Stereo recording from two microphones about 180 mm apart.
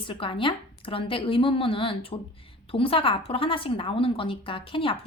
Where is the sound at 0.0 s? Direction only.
30° left (ahead or behind).